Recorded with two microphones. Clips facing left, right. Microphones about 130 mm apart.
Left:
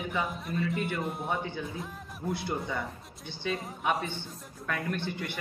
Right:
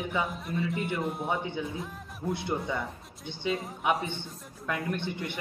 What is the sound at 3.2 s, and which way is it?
A man's voice, 20° right (ahead or behind).